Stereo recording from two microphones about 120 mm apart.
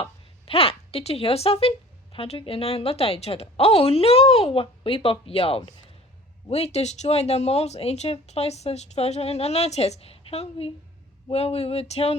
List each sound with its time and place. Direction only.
0.0 s speech: 50° left (ahead or behind)